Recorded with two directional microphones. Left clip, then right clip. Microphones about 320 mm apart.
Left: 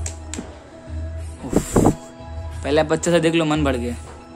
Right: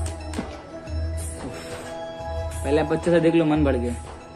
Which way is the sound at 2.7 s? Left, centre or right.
Left.